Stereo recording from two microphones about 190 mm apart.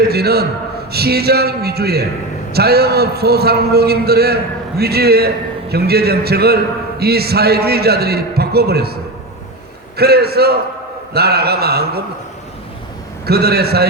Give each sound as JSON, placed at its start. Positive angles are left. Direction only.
{"t": 0.1, "sound": "a man's voice", "side_deg": -55}
{"t": 10.0, "sound": "a man's voice", "side_deg": -55}
{"t": 13.2, "sound": "a man's voice", "side_deg": -55}